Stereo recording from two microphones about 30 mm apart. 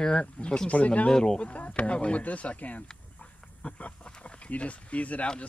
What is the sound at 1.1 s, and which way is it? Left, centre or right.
Speech, left.